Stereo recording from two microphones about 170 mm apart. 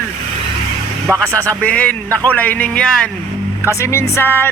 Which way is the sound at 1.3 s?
10° left (ahead or behind).